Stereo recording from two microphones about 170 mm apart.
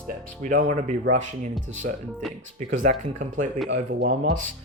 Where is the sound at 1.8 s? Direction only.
70° right (ahead or behind).